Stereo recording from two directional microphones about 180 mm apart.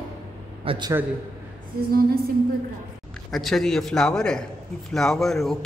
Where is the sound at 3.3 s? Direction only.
Centre (ahead or behind).